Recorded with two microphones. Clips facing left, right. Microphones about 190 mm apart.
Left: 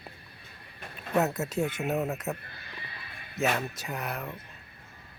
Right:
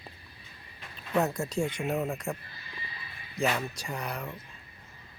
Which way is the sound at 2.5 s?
60° left (ahead or behind).